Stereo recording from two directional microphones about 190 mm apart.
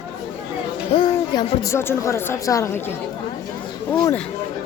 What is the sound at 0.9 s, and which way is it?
Speech, 25° left (ahead or behind).